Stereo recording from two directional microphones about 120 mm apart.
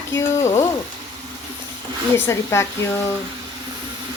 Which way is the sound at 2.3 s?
25° left (ahead or behind).